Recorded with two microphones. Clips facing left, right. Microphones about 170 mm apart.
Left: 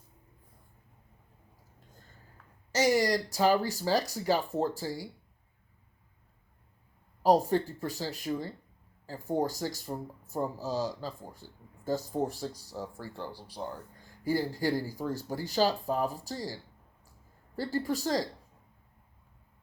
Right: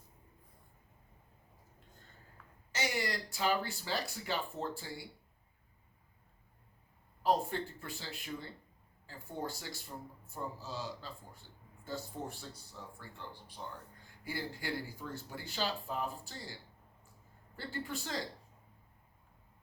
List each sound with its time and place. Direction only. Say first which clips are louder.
2.7 s speech: left 11 dB; 40° left (ahead or behind)
7.2 s speech: left 8 dB; 40° left (ahead or behind)
12.7 s speech: left 11 dB; 50° left (ahead or behind)
17.6 s speech: left 10 dB; 40° left (ahead or behind)